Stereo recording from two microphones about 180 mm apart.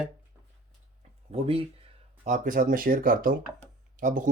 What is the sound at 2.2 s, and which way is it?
Speech, 45° right (ahead or behind).